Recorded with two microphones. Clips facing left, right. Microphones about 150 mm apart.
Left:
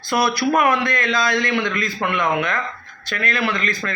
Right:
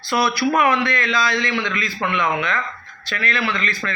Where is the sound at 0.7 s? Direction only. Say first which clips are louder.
Even; 45° left (ahead or behind).